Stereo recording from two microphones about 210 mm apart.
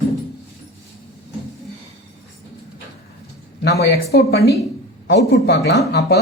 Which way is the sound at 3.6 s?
50° left (ahead or behind).